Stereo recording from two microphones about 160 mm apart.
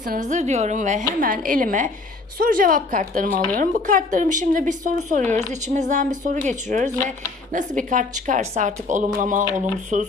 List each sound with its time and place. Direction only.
0.1 s a woman's voice: 50° right (ahead or behind)